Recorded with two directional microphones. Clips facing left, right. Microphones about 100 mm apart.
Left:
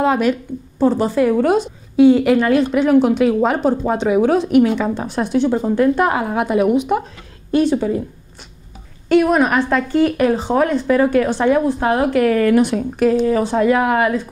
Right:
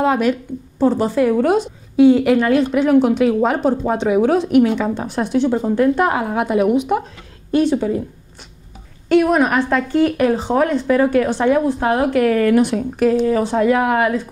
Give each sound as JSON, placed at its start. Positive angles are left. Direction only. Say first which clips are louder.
{"t": 0.0, "sound": "speech", "louder": "even", "side_deg": 15}
{"t": 9.1, "sound": "speech", "louder": "even", "side_deg": 15}